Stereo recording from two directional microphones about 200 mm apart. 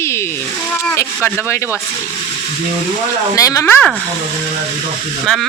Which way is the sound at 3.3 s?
15° left (ahead or behind).